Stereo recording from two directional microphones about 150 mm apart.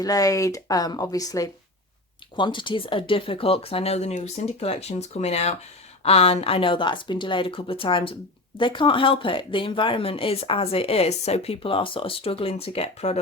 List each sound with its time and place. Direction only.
0.0 s speech: 25° left (ahead or behind); by 13.1 s 45° left (ahead or behind)